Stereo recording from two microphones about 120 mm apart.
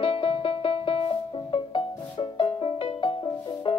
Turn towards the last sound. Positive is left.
turn(degrees=45)  # may be behind; listen again after turning